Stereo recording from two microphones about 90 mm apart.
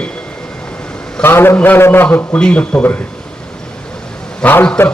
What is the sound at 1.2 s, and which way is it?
A man's voice, 25° left (ahead or behind).